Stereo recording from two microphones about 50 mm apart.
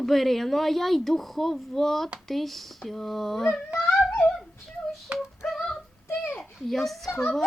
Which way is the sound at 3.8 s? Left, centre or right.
Centre.